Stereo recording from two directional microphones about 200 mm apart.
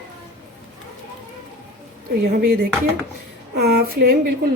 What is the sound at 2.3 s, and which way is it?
A woman's voice, 50° right (ahead or behind).